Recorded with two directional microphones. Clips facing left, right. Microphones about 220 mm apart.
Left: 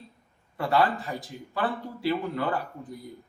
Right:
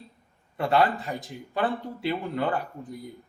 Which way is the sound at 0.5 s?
20° right (ahead or behind).